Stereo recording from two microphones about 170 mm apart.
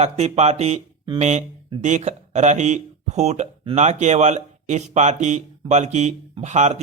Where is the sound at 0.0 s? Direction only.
40° right (ahead or behind).